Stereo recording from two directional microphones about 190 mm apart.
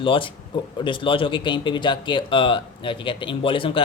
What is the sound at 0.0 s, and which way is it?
Speech, 25° left (ahead or behind).